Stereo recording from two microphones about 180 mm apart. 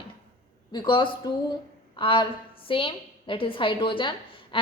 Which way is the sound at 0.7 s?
25° left (ahead or behind).